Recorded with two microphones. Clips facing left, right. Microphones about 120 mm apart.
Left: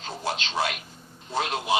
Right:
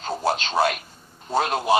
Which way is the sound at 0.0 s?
45° right (ahead or behind).